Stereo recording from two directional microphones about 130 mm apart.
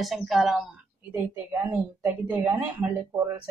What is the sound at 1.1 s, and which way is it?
A woman's voice, 15° right (ahead or behind).